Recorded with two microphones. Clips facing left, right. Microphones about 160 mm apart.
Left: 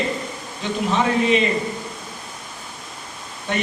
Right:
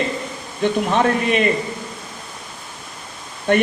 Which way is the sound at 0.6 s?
55° right (ahead or behind).